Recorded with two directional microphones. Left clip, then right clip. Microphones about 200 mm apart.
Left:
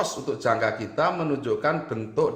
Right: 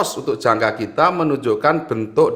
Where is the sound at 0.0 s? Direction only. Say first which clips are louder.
Right 7 dB; 40° right (ahead or behind).